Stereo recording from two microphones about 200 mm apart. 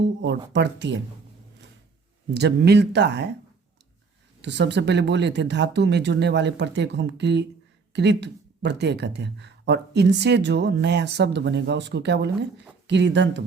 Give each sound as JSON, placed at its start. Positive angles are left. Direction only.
{"t": 0.0, "sound": "speech", "side_deg": -60}
{"t": 2.3, "sound": "speech", "side_deg": -55}
{"t": 4.4, "sound": "speech", "side_deg": -60}